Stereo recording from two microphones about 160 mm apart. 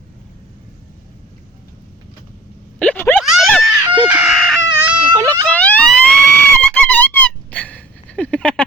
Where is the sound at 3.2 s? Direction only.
5° right (ahead or behind).